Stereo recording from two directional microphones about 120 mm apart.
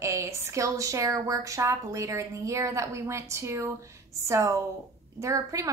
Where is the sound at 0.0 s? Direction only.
25° right (ahead or behind).